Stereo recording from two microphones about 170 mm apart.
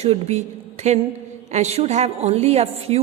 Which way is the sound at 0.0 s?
40° right (ahead or behind).